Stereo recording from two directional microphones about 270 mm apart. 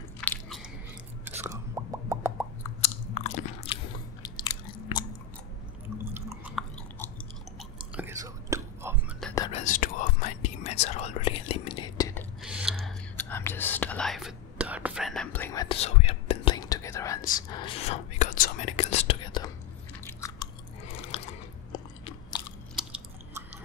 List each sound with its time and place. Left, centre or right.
0.2 s biting: centre
1.4 s plop: centre
2.8 s biting: left
6.1 s chewing: centre
9.3 s whispering: centre
9.7 s whispering: left; by 12.3 s centre
12.4 s a sound: centre
12.8 s whispering: centre
20.2 s chewing: centre
21.1 s biting: left